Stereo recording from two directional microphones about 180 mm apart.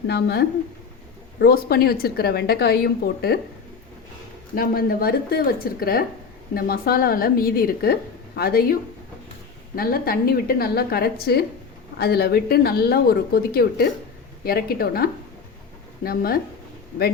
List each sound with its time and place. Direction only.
0.1 s a woman's voice: 65° left (ahead or behind)
4.5 s a woman's voice: 55° left (ahead or behind)
9.7 s a woman's voice: 55° left (ahead or behind)